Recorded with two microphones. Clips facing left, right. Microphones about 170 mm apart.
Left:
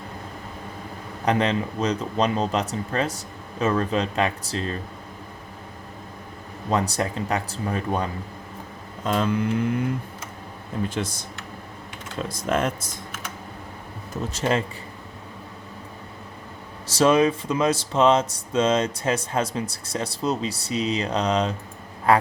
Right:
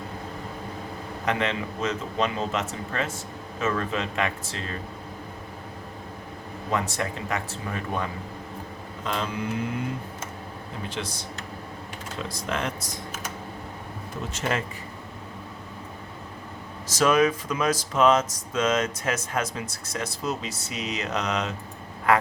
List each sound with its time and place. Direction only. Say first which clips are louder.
1.2 s speech: left 5 dB; 35° left (ahead or behind)
6.7 s speech: left 4 dB; 35° left (ahead or behind)
10.8 s speech: left 2 dB; 50° left (ahead or behind)
12.3 s speech: left 7 dB; 50° left (ahead or behind)
14.3 s speech: left 5 dB; 30° left (ahead or behind)
16.8 s speech: left 3 dB; 30° left (ahead or behind)